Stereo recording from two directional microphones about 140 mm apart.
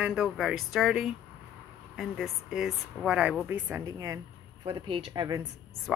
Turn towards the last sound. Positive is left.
turn(degrees=-25)  # may be behind; listen again after turning